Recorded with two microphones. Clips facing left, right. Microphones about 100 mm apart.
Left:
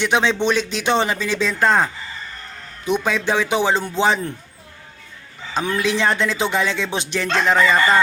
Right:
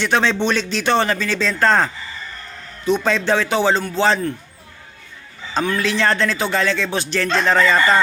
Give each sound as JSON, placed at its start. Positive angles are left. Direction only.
{"t": 0.0, "sound": "speech", "side_deg": 15}
{"t": 5.6, "sound": "speech", "side_deg": 15}